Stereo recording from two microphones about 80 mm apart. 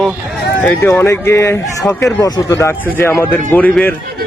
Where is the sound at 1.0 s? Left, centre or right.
Left.